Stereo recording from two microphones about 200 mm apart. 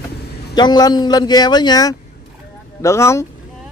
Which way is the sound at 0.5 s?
20° left (ahead or behind).